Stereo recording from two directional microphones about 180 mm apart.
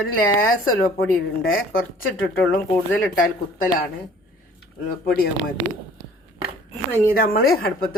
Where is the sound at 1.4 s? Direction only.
90° left.